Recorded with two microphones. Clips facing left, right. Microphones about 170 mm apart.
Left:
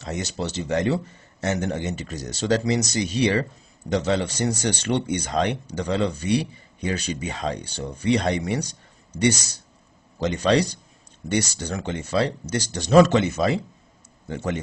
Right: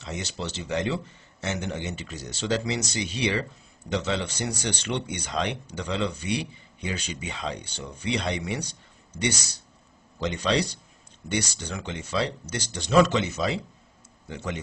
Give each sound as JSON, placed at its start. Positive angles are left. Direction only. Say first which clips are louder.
{"t": 0.0, "sound": "speech", "louder": "left 5 dB", "side_deg": 45}